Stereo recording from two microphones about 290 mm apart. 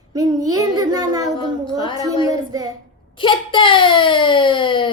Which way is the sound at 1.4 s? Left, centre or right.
Centre.